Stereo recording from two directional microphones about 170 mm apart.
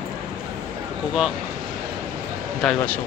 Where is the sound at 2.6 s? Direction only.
10° left (ahead or behind).